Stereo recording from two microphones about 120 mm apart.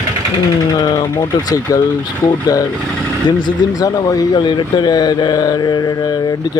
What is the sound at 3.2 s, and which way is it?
Speech, 35° left (ahead or behind).